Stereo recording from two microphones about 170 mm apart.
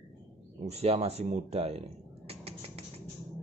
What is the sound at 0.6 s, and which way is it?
Speech, 40° right (ahead or behind).